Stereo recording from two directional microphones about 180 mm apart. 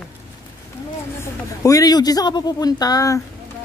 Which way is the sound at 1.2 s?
20° left (ahead or behind).